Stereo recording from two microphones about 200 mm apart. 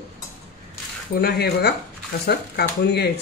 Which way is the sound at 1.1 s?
50° left (ahead or behind).